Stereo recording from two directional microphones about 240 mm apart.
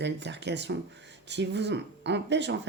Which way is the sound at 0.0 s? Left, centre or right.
Right.